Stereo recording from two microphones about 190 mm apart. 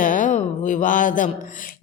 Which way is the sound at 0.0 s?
45° left (ahead or behind).